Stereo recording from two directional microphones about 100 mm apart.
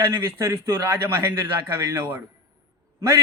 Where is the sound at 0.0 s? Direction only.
30° right (ahead or behind).